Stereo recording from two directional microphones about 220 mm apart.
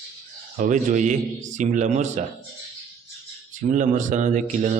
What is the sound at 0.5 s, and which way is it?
Speech, 35° right (ahead or behind).